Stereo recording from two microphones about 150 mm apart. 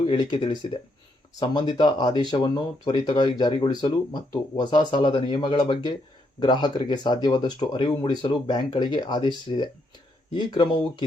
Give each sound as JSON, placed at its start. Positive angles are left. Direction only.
{"t": 0.0, "sound": "speech", "side_deg": 35}
{"t": 10.3, "sound": "speech", "side_deg": 30}